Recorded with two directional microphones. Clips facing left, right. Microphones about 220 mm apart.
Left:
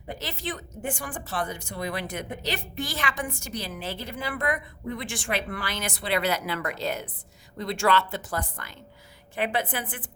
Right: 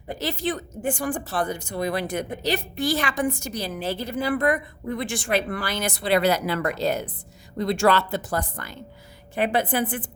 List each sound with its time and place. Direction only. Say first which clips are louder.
0.2 s a woman's voice: right 11 dB; 35° right (ahead or behind)